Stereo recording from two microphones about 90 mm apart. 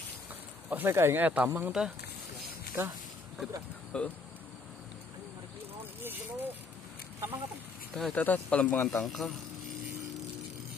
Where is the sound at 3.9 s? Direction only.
10° left (ahead or behind).